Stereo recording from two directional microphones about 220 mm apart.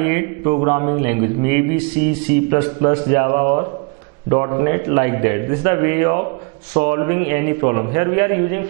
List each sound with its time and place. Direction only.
0.0 s a man's voice: 15° right (ahead or behind)